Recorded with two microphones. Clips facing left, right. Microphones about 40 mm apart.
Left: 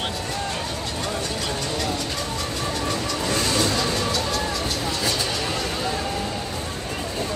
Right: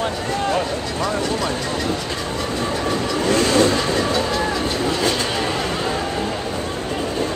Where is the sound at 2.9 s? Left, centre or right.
Right.